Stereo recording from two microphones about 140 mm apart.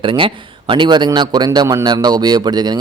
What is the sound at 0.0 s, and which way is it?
Speech, 35° right (ahead or behind).